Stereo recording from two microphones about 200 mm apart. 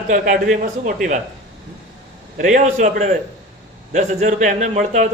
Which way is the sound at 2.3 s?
40° right (ahead or behind).